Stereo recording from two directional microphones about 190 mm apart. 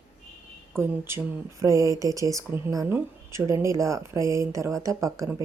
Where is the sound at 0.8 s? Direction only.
15° right (ahead or behind).